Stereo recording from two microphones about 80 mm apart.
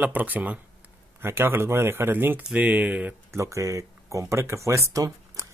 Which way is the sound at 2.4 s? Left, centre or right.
Centre.